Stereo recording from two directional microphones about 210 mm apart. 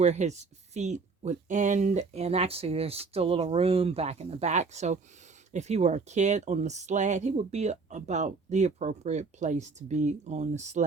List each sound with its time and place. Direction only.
0.0 s speech: 35° right (ahead or behind)